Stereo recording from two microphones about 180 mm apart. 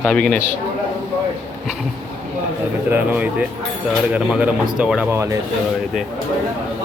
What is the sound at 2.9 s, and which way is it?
A man's voice, 10° right (ahead or behind).